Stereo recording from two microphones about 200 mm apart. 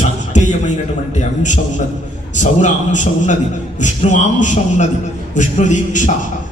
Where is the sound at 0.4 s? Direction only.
35° left (ahead or behind).